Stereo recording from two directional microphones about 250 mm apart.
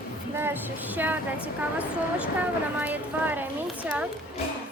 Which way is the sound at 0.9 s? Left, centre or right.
Centre.